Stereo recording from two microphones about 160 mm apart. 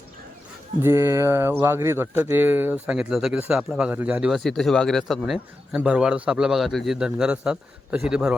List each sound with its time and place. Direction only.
0.8 s speech: 15° right (ahead or behind)